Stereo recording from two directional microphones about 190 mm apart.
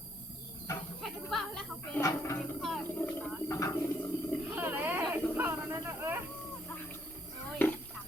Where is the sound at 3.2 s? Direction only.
5° left (ahead or behind).